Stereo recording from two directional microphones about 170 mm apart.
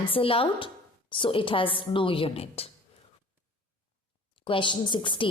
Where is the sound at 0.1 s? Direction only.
35° left (ahead or behind).